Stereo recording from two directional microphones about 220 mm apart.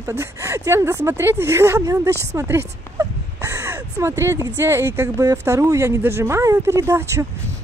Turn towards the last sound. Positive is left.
turn(degrees=-10)  # may be behind; listen again after turning